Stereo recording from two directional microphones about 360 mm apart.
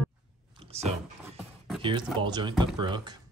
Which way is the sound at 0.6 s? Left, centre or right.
Centre.